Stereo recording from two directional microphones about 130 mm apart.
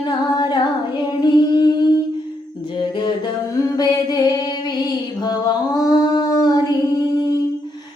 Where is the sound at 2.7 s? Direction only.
35° left (ahead or behind).